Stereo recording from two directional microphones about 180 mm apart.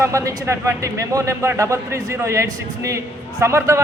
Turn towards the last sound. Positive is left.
turn(degrees=-15)  # may be behind; listen again after turning